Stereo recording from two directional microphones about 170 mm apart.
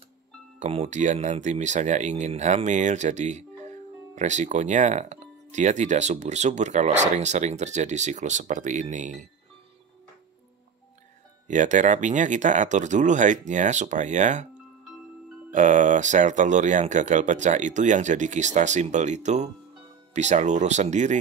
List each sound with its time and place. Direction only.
0.6 s speech: 40° right (ahead or behind)
11.4 s speech: 45° right (ahead or behind)
15.5 s speech: 45° right (ahead or behind)